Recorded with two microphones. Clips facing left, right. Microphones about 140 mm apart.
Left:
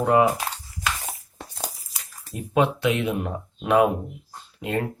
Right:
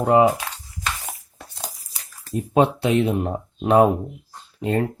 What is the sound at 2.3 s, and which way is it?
Speech, 30° right (ahead or behind).